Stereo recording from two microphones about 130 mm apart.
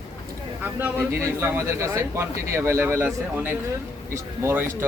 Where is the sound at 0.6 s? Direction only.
15° right (ahead or behind).